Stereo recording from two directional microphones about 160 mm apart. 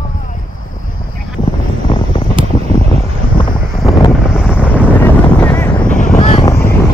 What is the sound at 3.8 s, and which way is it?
Vehicle, 20° left (ahead or behind).